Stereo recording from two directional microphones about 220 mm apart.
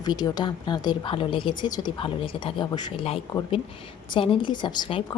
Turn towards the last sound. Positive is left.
turn(degrees=20)  # may be behind; listen again after turning